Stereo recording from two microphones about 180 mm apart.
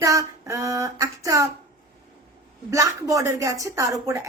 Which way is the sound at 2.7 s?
20° right (ahead or behind).